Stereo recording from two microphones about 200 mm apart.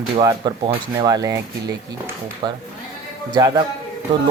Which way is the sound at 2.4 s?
20° right (ahead or behind).